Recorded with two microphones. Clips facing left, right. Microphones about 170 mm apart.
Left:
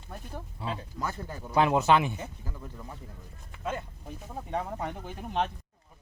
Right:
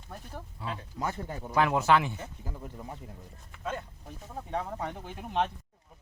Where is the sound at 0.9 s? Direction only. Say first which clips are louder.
Right 1 dB; 20° right (ahead or behind).